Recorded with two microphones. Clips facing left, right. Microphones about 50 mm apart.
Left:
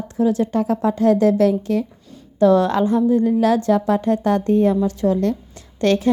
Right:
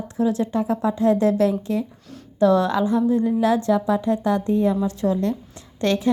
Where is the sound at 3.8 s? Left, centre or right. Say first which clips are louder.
Left 3 dB; left.